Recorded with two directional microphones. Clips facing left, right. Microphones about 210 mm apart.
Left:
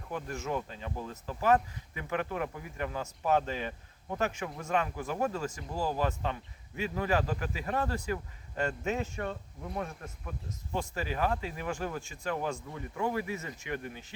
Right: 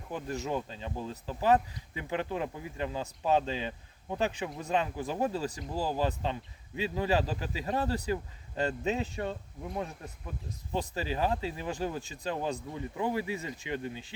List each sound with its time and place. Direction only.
0.1 s speech: 35° right (ahead or behind)
5.3 s speech: 35° right (ahead or behind)
6.0 s speech: 25° right (ahead or behind)
8.8 s speech: 20° right (ahead or behind)
10.8 s speech: 30° right (ahead or behind)